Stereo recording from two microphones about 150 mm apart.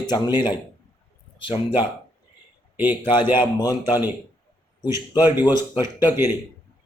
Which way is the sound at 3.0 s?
30° left (ahead or behind).